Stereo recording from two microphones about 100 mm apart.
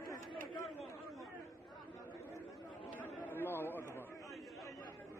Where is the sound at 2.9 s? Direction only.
15° left (ahead or behind).